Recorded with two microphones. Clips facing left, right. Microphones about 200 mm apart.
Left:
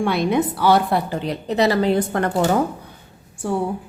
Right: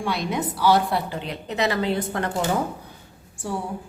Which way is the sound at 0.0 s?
60° left (ahead or behind).